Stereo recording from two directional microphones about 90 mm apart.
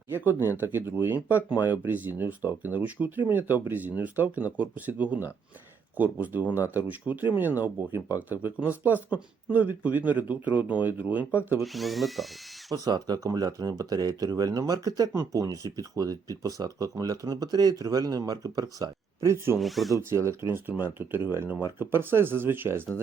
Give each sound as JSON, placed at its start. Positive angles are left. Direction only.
{"t": 0.1, "sound": "speech", "side_deg": -25}
{"t": 11.6, "sound": "speech", "side_deg": 0}
{"t": 12.7, "sound": "speech", "side_deg": -45}
{"t": 15.1, "sound": "speech", "side_deg": -35}
{"t": 19.5, "sound": "speech", "side_deg": 0}
{"t": 20.0, "sound": "speech", "side_deg": -30}